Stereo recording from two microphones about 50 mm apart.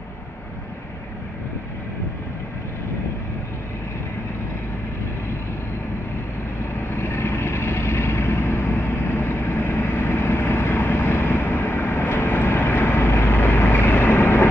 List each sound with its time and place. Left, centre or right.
7.0 s vehicle: left